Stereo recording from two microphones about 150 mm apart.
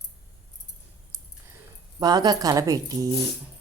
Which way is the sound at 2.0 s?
25° right (ahead or behind).